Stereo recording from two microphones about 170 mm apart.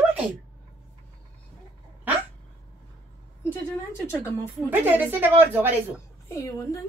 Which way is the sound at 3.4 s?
15° left (ahead or behind).